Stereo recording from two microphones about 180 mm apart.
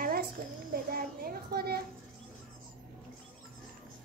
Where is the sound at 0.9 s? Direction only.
55° right (ahead or behind).